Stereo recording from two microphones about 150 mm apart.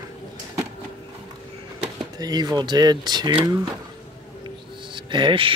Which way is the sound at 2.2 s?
25° right (ahead or behind).